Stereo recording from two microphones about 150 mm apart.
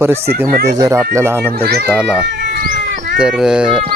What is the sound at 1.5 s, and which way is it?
Speech, 90° right.